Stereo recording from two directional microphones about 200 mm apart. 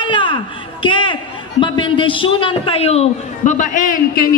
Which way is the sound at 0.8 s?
25° left (ahead or behind).